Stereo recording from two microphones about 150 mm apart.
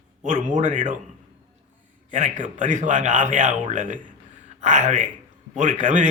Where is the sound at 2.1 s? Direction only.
55° right (ahead or behind).